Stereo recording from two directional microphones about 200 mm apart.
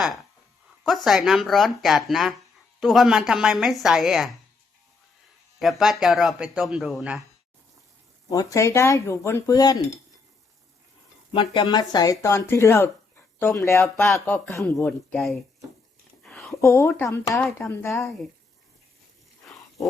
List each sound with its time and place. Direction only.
0.9 s a man's voice: centre (ahead or behind)
5.5 s a man's voice: centre (ahead or behind)
8.3 s speech: 15° left (ahead or behind)
11.3 s a woman's voice: 25° left (ahead or behind)